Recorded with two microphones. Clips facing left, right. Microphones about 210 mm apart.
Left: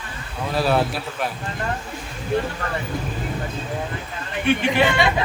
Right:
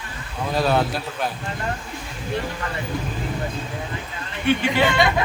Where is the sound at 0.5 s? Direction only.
5° left (ahead or behind).